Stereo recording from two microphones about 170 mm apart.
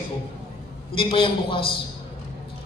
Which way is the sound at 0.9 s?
30° left (ahead or behind).